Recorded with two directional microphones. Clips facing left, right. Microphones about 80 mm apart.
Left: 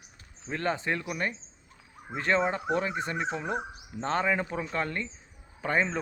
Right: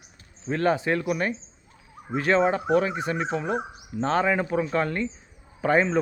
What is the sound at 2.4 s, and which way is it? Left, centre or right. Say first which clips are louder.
Speech: right 6 dB; centre.